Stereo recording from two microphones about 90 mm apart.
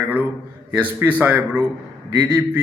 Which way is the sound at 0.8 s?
20° right (ahead or behind).